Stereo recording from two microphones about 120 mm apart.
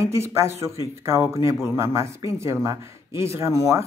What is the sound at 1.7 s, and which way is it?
Speech, 25° right (ahead or behind).